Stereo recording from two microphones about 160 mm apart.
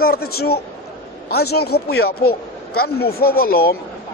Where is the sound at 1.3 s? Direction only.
80° left.